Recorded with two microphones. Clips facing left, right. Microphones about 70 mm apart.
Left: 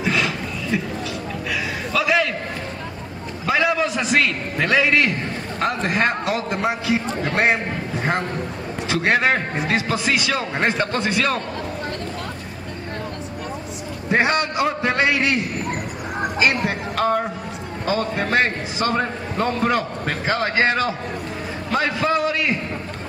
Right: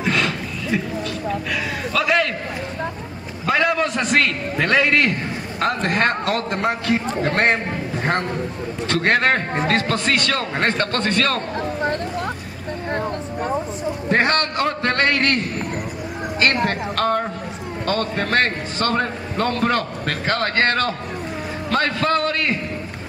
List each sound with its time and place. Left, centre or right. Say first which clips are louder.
0.0 s a sound: right 1 dB; centre
3.4 s a man's voice: right 1 dB; centre
14.0 s a man's voice: even; centre